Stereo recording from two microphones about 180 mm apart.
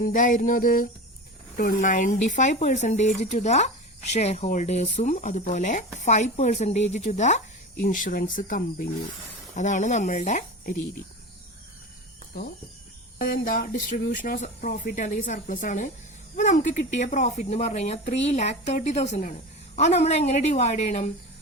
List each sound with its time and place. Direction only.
0.0 s speech: 45° left (ahead or behind)
13.1 s speech: 50° left (ahead or behind)